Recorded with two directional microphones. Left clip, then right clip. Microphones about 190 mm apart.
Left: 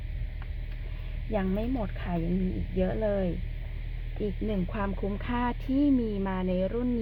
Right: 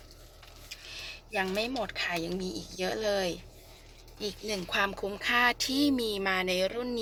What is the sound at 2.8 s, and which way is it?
Speech, 20° right (ahead or behind).